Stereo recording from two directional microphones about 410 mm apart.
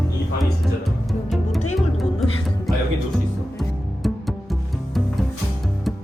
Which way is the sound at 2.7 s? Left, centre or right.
Centre.